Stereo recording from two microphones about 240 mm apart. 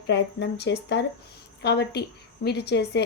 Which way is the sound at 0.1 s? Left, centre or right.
Left.